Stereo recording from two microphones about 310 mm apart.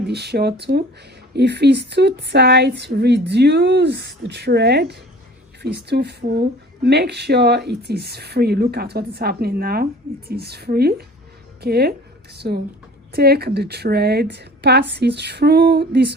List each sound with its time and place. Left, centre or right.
0.1 s a woman's voice: right